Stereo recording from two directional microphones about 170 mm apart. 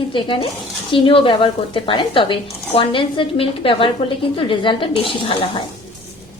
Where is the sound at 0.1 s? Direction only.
30° left (ahead or behind).